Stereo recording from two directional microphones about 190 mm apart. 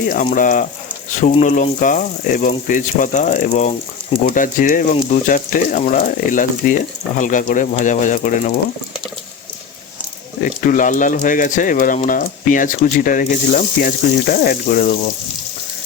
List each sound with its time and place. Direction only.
0.3 s speech: 45° left (ahead or behind)
10.4 s speech: 45° left (ahead or behind)